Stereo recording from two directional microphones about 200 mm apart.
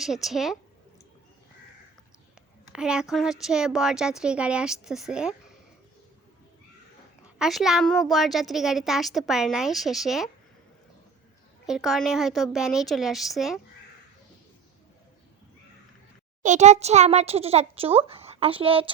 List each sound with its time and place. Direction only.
0.0 s a woman's voice: centre (ahead or behind)
2.7 s a woman's voice: 5° right (ahead or behind)
7.3 s a woman's voice: centre (ahead or behind)
11.6 s a woman's voice: centre (ahead or behind)
16.4 s speech: 35° right (ahead or behind)